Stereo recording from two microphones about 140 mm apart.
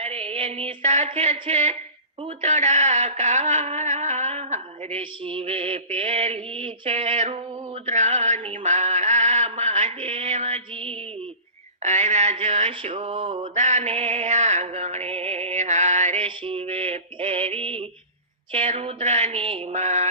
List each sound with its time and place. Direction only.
0.0 s a sound: 45° right (ahead or behind)
2.2 s mantra: 55° right (ahead or behind)
4.9 s mantra: 40° right (ahead or behind)
11.8 s a sound: 55° right (ahead or behind)
16.2 s mantra: 40° right (ahead or behind)
19.7 s mantra: 55° right (ahead or behind)